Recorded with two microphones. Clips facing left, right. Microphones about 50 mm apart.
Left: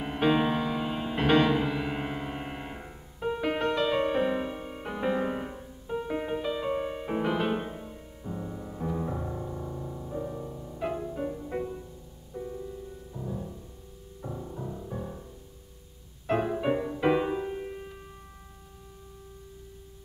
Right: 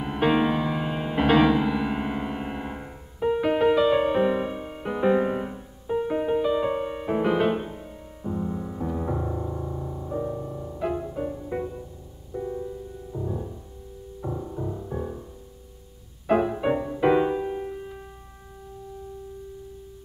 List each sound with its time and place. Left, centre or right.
0.0 s music: centre
8.2 s piano: centre
10.5 s music: right
10.8 s music: centre
12.3 s music: centre
16.3 s music: centre